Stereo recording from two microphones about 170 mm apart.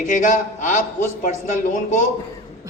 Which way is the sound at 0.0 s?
50° left (ahead or behind).